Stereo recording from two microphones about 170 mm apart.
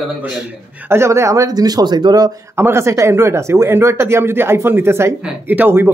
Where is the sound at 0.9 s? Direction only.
15° right (ahead or behind).